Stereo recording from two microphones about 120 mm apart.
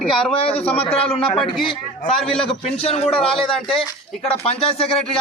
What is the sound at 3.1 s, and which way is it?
Speech, 5° left (ahead or behind).